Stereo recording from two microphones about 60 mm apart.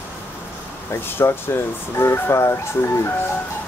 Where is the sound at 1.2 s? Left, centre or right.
Left.